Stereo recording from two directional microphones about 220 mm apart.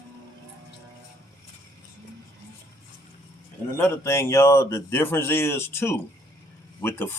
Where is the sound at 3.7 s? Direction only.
10° left (ahead or behind).